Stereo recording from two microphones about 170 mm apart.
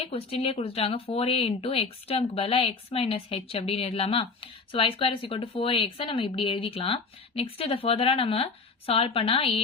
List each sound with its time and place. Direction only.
0.0 s speech: 35° left (ahead or behind)